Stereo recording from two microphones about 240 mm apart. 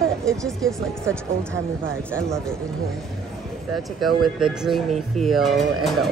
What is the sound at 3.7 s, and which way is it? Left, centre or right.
Speech, centre.